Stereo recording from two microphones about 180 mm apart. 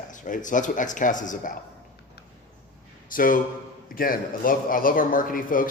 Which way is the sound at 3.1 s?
50° left (ahead or behind).